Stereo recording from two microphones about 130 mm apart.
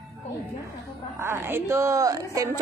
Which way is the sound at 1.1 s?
20° right (ahead or behind).